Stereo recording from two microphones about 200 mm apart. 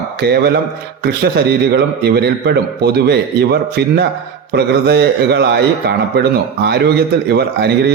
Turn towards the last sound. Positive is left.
turn(degrees=-55)  # may be behind; listen again after turning